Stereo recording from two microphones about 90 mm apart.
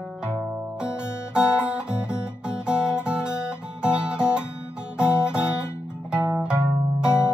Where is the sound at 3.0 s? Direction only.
10° right (ahead or behind).